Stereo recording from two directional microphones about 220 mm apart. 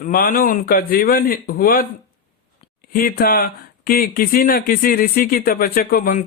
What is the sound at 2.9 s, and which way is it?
A man's voice, 40° left (ahead or behind).